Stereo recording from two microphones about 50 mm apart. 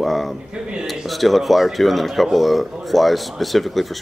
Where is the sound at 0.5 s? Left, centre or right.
Centre.